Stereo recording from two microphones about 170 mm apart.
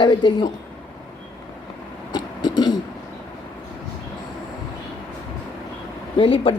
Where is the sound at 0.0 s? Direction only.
25° left (ahead or behind).